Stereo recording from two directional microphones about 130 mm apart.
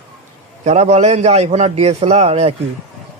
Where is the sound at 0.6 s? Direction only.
60° right (ahead or behind).